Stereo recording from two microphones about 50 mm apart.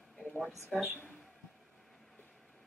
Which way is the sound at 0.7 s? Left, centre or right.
Centre.